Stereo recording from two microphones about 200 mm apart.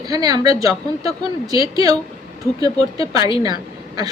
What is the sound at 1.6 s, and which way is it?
A woman's voice, 20° right (ahead or behind).